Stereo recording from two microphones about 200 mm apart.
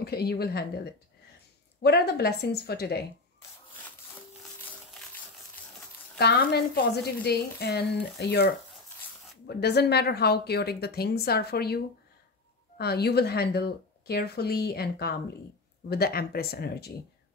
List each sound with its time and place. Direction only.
0.0 s speech: 55° left (ahead or behind)
6.1 s a woman's voice: 55° left (ahead or behind)